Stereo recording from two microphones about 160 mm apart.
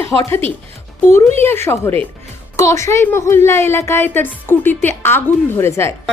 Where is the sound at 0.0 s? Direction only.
15° left (ahead or behind).